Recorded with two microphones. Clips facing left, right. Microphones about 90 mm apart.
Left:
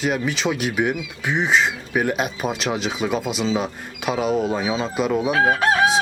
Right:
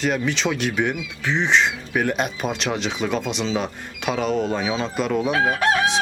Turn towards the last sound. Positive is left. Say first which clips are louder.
# left 2 dB
turn(degrees=5)  # may be behind; listen again after turning